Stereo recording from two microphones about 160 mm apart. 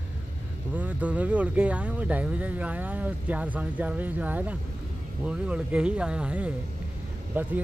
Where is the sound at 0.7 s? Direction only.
10° right (ahead or behind).